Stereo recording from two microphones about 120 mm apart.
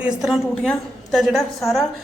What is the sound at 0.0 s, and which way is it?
A woman's voice, 5° right (ahead or behind).